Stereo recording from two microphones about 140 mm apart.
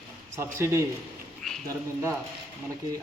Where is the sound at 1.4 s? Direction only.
5° left (ahead or behind).